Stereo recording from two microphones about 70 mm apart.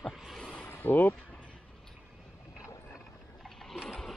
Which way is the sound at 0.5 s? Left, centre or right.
Left.